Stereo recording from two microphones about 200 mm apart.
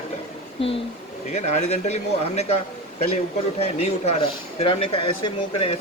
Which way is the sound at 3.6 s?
30° left (ahead or behind).